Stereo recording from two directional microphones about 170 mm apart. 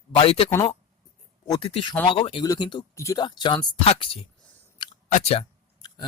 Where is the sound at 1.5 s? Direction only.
30° left (ahead or behind).